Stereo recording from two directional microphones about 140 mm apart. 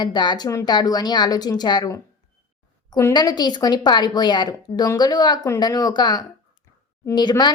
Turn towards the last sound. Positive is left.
turn(degrees=30)  # may be behind; listen again after turning